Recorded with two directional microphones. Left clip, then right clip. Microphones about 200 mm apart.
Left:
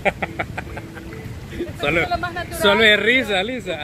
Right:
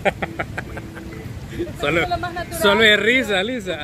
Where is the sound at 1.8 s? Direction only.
Centre (ahead or behind).